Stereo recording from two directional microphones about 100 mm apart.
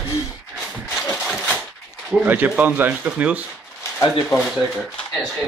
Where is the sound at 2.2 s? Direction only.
20° right (ahead or behind).